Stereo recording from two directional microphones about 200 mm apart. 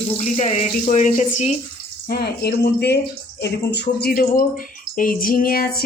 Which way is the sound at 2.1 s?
55° left (ahead or behind).